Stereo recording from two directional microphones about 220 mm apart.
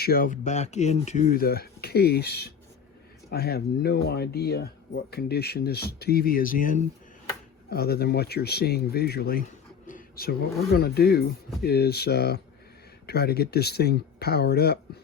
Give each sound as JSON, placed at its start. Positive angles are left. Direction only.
{"t": 0.0, "sound": "speech", "side_deg": 40}